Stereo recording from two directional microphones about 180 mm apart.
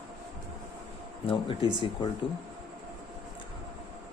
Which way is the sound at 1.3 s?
30° left (ahead or behind).